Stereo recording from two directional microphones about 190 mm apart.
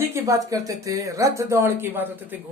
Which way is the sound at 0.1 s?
15° right (ahead or behind).